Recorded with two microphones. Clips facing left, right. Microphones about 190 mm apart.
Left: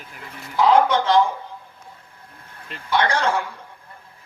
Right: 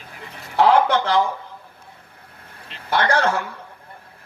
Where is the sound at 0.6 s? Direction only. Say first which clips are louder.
Even; 70° right (ahead or behind).